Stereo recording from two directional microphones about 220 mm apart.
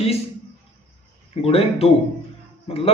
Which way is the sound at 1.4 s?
25° left (ahead or behind).